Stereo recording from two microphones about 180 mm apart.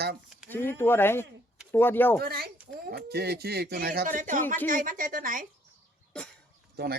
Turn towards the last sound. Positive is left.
turn(degrees=-60)  # may be behind; listen again after turning